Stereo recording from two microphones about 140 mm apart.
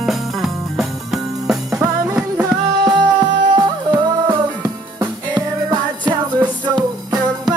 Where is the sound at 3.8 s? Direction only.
15° right (ahead or behind).